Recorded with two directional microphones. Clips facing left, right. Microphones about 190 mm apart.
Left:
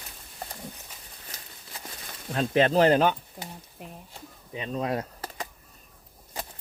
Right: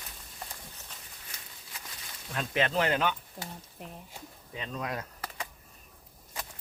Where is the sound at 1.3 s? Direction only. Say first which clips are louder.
Left 4 dB; 40° left (ahead or behind).